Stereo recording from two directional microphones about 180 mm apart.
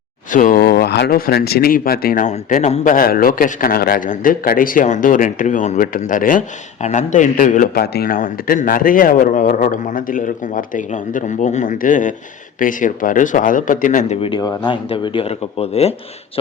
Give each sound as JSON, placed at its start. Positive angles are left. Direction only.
{"t": 0.3, "sound": "speech", "side_deg": 45}
{"t": 14.2, "sound": "speech", "side_deg": 25}